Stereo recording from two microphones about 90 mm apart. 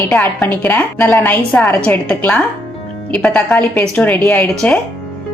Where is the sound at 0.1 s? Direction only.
15° left (ahead or behind).